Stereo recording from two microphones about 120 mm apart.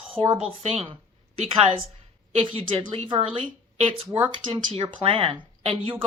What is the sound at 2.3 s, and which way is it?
Speech, 50° right (ahead or behind).